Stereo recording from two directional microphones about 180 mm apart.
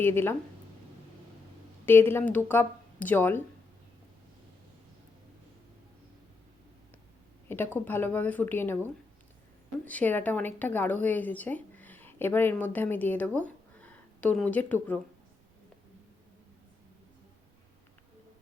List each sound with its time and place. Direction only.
0.0 s speech: 10° left (ahead or behind)
1.9 s speech: 10° left (ahead or behind)
7.4 s speech: 10° left (ahead or behind)